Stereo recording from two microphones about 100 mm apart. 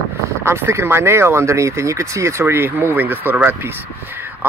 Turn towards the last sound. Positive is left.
turn(degrees=-20)  # may be behind; listen again after turning